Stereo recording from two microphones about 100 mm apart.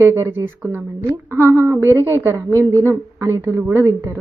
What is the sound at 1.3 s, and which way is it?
A woman's voice, 25° right (ahead or behind).